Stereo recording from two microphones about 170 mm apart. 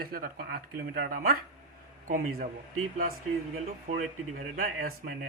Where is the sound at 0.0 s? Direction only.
65° right (ahead or behind).